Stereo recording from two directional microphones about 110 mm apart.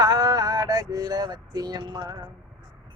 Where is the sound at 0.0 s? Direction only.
35° right (ahead or behind).